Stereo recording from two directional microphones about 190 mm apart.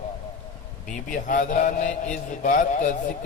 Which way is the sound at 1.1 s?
45° left (ahead or behind).